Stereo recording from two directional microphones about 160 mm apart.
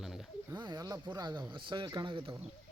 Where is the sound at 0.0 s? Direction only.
Centre (ahead or behind).